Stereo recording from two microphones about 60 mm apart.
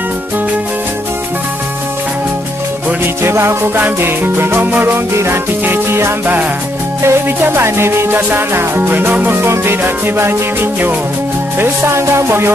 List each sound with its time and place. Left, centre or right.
3.2 s music: right
4.9 s music: right
11.6 s music: right